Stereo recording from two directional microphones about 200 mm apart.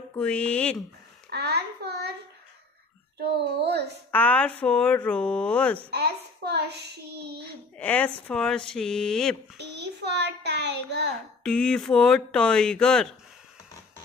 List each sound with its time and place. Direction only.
0.1 s speech: 5° left (ahead or behind)
1.3 s a child's voice: 55° right (ahead or behind)
3.3 s a child's voice: 55° right (ahead or behind)
4.1 s speech: 10° left (ahead or behind)
5.9 s a child's voice: 55° right (ahead or behind)
7.7 s speech: 5° left (ahead or behind)
9.6 s a child's voice: 60° right (ahead or behind)
11.4 s speech: 5° left (ahead or behind)